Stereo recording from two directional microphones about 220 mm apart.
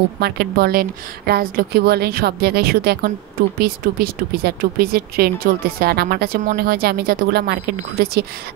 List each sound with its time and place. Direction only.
0.2 s speech: 45° right (ahead or behind)